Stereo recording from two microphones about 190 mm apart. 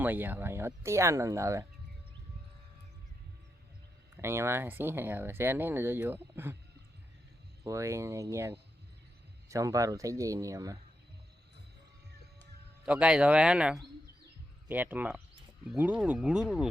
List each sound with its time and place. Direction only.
0.0 s speech: 10° right (ahead or behind)
4.2 s speech: 15° right (ahead or behind)
7.6 s speech: 15° right (ahead or behind)
12.8 s speech: 5° right (ahead or behind)